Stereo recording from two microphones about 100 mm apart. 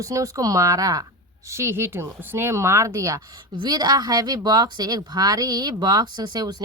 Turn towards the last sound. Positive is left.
turn(degrees=-45)  # may be behind; listen again after turning